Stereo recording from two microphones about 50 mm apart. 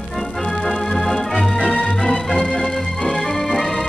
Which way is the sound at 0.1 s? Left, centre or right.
Centre.